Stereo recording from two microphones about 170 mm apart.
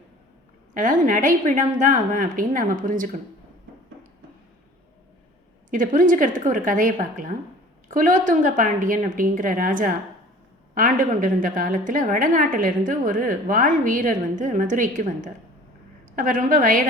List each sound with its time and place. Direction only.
0.7 s a woman's voice: 50° right (ahead or behind)
5.7 s a woman's voice: 50° right (ahead or behind)